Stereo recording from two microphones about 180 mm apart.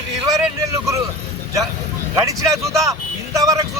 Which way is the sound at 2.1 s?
20° right (ahead or behind).